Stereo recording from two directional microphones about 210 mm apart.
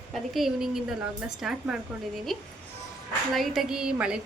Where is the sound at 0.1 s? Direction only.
Centre (ahead or behind).